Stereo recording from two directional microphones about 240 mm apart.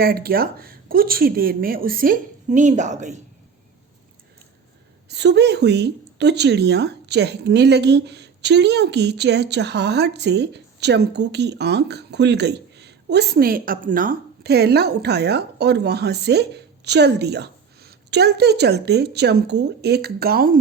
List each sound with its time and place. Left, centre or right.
0.0 s speech: right
5.0 s a woman's voice: right